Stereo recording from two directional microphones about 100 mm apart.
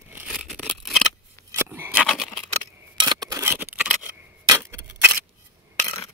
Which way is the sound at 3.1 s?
35° right (ahead or behind).